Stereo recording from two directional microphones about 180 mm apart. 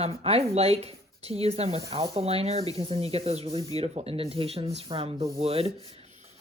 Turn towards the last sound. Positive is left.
turn(degrees=-35)  # may be behind; listen again after turning